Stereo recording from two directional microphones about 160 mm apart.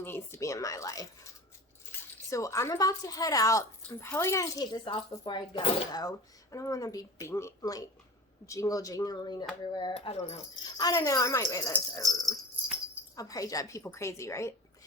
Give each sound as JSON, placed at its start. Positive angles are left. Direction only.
{"t": 0.0, "sound": "speech", "side_deg": 15}
{"t": 10.8, "sound": "speech", "side_deg": 20}
{"t": 12.0, "sound": "dog", "side_deg": 0}
{"t": 13.1, "sound": "speech", "side_deg": 20}